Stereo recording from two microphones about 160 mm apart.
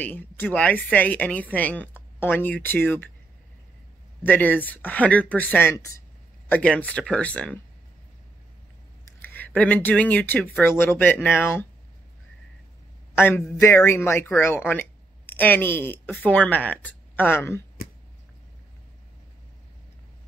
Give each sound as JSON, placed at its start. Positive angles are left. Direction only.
{"t": 0.0, "sound": "speech", "side_deg": 10}
{"t": 4.2, "sound": "speech", "side_deg": 10}
{"t": 9.2, "sound": "speech", "side_deg": 10}
{"t": 13.1, "sound": "speech", "side_deg": 15}
{"t": 17.8, "sound": "a sound", "side_deg": 65}